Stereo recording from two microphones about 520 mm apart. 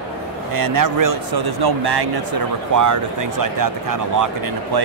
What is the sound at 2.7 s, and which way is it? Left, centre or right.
A man's voice, right.